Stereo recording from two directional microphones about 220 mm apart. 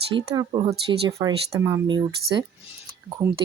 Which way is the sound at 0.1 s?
20° right (ahead or behind).